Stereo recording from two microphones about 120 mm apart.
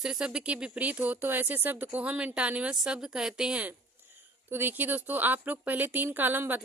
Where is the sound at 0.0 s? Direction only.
5° right (ahead or behind).